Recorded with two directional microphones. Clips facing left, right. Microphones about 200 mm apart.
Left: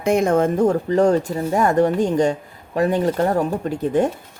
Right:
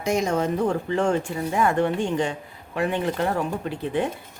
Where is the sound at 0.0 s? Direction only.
55° left (ahead or behind).